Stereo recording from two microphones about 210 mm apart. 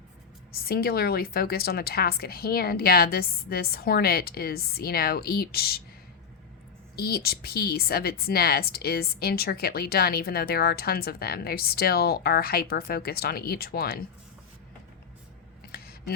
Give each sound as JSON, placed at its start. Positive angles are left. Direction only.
{"t": 0.5, "sound": "a woman's voice", "side_deg": 45}
{"t": 6.9, "sound": "a woman's voice", "side_deg": 45}
{"t": 15.7, "sound": "a sound", "side_deg": 45}